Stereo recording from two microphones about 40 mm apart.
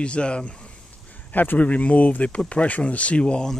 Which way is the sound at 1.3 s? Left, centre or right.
Left.